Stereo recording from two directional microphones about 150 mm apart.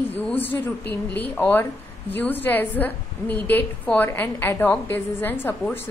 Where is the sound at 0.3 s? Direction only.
10° left (ahead or behind).